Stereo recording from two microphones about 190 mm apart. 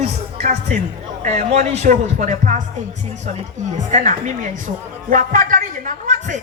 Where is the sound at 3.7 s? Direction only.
40° right (ahead or behind).